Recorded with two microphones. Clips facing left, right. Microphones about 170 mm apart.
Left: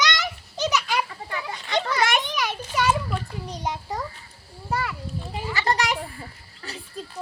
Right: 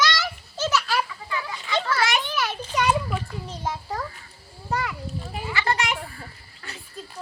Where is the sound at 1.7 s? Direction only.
15° left (ahead or behind).